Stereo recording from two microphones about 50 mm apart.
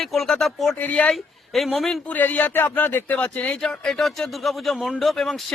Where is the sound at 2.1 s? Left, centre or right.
Left.